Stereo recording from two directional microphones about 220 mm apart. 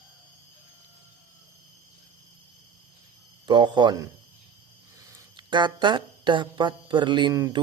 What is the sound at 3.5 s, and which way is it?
A man's voice, 20° right (ahead or behind).